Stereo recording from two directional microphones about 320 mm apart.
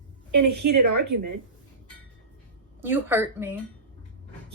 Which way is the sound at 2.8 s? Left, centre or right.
Centre.